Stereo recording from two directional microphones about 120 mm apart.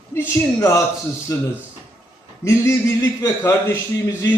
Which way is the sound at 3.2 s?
20° left (ahead or behind).